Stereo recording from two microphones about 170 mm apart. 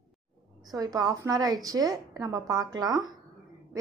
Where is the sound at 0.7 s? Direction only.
20° right (ahead or behind).